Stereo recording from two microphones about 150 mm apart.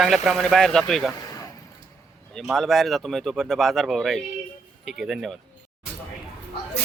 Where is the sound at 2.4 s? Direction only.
Centre (ahead or behind).